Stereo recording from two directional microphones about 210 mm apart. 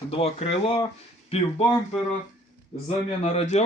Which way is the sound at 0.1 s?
30° left (ahead or behind).